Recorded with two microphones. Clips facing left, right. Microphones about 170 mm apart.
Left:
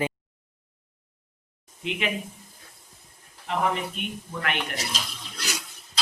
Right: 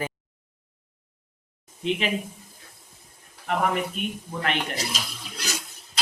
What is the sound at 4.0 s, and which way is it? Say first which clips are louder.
Speech: right 3 dB; 30° right (ahead or behind).